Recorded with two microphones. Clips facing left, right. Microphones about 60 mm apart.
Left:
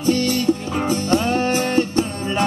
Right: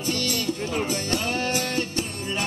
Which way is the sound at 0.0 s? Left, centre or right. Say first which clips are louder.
Left 9 dB; left.